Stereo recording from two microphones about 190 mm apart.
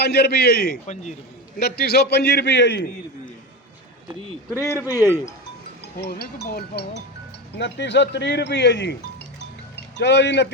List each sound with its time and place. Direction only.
0.0 s speech: 55° left (ahead or behind)
4.5 s a man's voice: 15° left (ahead or behind)
4.9 s speech: 10° right (ahead or behind)
6.0 s speech: 55° left (ahead or behind)